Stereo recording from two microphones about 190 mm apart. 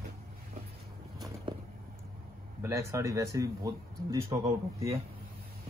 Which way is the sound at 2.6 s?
15° right (ahead or behind).